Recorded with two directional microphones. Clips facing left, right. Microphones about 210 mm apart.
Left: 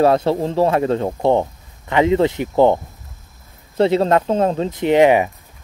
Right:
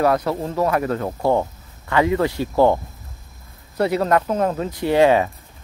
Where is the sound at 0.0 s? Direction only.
25° left (ahead or behind).